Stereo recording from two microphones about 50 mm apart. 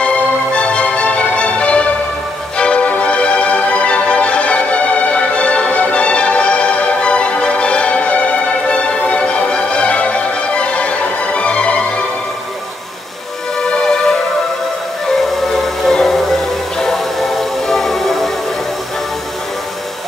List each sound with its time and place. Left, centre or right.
0.0 s music: left
13.6 s music: centre